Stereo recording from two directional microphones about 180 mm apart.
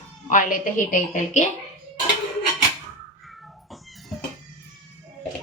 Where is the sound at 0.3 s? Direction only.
45° left (ahead or behind).